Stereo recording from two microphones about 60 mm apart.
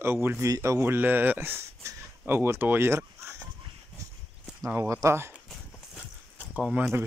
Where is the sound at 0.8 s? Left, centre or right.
Right.